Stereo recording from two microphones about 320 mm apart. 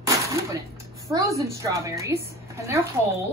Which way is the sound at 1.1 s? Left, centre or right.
Centre.